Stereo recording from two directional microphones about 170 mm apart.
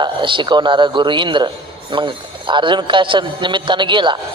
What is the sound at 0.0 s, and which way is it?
A man's voice, 30° right (ahead or behind).